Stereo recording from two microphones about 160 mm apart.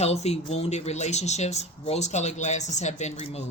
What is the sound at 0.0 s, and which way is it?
Speech, 40° left (ahead or behind).